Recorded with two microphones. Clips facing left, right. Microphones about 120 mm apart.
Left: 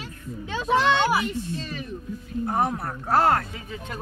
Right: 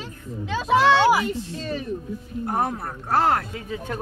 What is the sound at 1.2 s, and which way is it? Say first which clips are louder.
Speech: right 2 dB; 35° right (ahead or behind).